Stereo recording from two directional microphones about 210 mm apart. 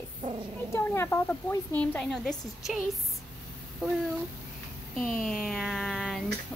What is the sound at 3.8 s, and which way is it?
Speech, 5° right (ahead or behind).